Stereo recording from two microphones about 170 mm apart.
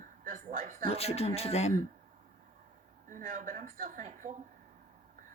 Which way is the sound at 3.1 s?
50° right (ahead or behind).